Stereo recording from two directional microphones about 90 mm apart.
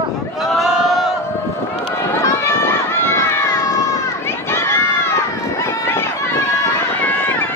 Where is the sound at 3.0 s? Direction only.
30° left (ahead or behind).